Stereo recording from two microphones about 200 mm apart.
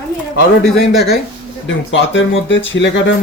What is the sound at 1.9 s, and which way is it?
Speech, 65° left (ahead or behind).